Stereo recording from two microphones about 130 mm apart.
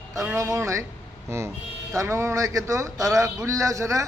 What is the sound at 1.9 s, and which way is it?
A man's voice, 20° right (ahead or behind).